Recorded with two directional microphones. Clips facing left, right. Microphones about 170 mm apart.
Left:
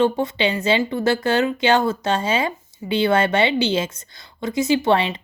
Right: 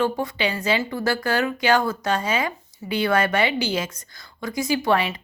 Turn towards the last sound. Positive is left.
turn(degrees=25)  # may be behind; listen again after turning